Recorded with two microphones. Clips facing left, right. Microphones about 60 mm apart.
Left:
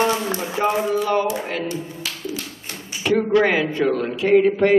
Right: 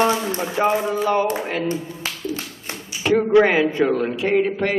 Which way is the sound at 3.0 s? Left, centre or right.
Centre.